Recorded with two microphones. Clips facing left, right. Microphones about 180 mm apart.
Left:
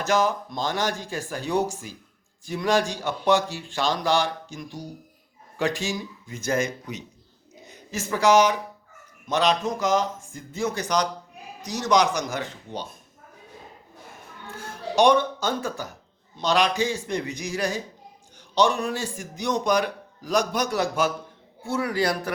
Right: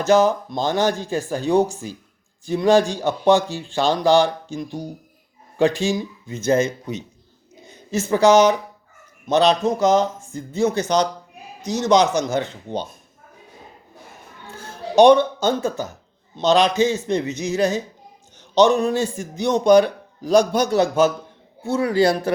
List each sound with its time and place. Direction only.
0.0 s a man's voice: 30° right (ahead or behind)
14.4 s a man's voice: 25° right (ahead or behind)